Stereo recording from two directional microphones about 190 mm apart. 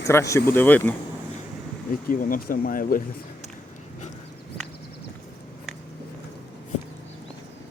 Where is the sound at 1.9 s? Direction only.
45° left (ahead or behind).